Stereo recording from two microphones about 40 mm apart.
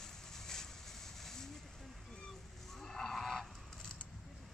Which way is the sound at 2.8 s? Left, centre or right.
Centre.